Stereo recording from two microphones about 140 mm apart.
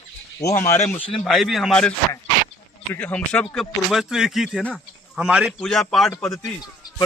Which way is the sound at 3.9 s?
5° right (ahead or behind).